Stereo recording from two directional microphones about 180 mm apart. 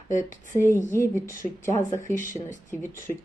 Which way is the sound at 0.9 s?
15° left (ahead or behind).